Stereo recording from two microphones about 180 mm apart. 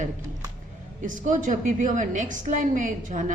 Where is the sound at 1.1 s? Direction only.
45° right (ahead or behind).